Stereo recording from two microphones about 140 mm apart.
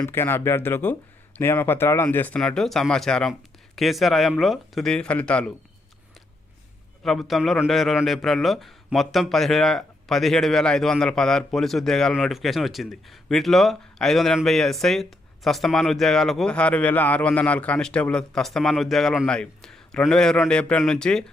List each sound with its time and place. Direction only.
0.0 s a man's voice: 15° left (ahead or behind)
7.0 s a man's voice: centre (ahead or behind)